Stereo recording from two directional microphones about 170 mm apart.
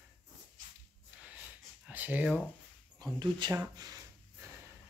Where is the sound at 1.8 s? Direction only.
10° right (ahead or behind).